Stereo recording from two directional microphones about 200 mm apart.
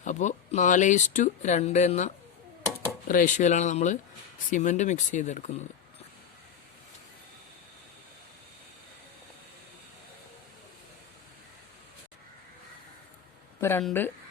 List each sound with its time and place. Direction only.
0.0 s speech: 35° left (ahead or behind)
13.6 s speech: 10° left (ahead or behind)